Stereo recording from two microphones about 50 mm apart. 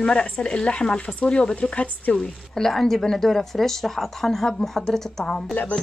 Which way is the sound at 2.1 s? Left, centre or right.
Centre.